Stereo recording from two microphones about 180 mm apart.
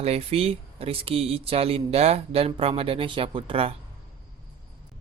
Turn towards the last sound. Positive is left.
turn(degrees=-30)  # may be behind; listen again after turning